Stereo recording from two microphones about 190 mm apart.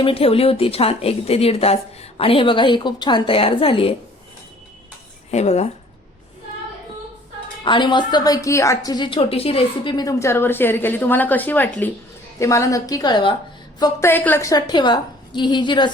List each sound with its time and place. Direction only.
0.0 s a woman's voice: 30° left (ahead or behind)
5.3 s speech: 35° left (ahead or behind)
7.6 s a woman's voice: 25° left (ahead or behind)